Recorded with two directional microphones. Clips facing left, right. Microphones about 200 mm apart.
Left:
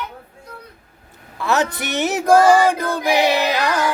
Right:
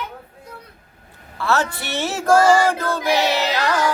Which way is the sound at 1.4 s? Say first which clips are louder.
Left 2 dB; 15° left (ahead or behind).